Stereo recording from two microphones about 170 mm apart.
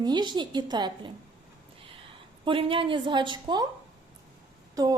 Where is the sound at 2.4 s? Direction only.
30° right (ahead or behind).